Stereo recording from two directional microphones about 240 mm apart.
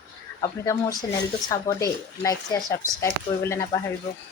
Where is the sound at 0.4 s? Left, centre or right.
Centre.